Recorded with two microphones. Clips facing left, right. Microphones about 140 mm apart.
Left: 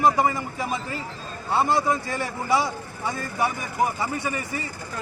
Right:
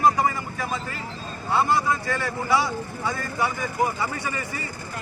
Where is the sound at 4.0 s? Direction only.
20° left (ahead or behind).